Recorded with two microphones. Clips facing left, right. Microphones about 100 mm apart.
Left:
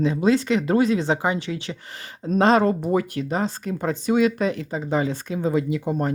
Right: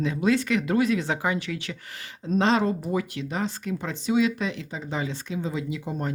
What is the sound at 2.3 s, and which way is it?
A woman's voice, 50° left (ahead or behind).